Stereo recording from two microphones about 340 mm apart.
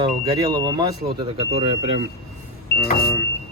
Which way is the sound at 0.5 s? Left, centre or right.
Centre.